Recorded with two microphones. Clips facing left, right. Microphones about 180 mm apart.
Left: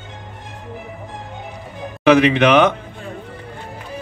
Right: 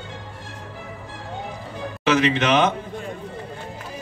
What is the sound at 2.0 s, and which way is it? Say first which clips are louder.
Music: left 7 dB; 60° left (ahead or behind).